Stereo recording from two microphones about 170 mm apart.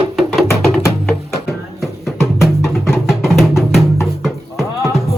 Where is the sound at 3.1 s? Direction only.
Centre (ahead or behind).